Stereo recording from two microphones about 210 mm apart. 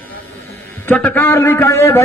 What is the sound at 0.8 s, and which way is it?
A man's voice, 10° left (ahead or behind).